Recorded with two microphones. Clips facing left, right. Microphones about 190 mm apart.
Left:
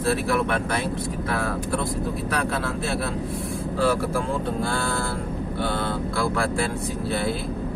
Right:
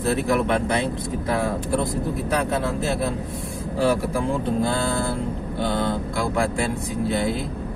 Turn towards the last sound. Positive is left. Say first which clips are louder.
# right 2 dB
turn(degrees=-20)  # may be behind; listen again after turning